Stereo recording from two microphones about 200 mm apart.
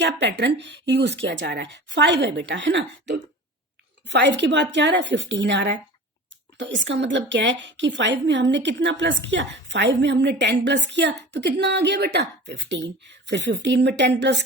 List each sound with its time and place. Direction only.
0.0 s a woman's voice: 60° right (ahead or behind)